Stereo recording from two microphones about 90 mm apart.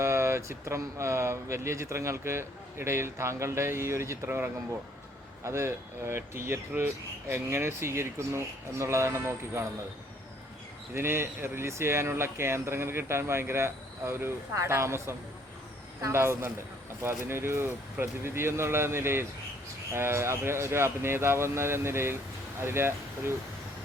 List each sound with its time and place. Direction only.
0.0 s speech: 30° right (ahead or behind)
5.5 s speech: 30° right (ahead or behind)
10.9 s speech: 30° right (ahead or behind)